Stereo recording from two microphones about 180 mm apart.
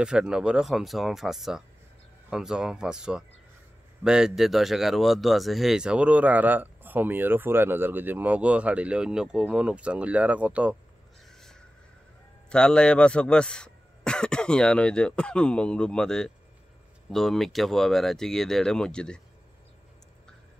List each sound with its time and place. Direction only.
0.0 s speech: 5° right (ahead or behind)
11.2 s a sound: centre (ahead or behind)
12.4 s speech: 5° left (ahead or behind)